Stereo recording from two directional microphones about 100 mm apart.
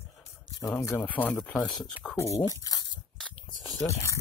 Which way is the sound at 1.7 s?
Centre (ahead or behind).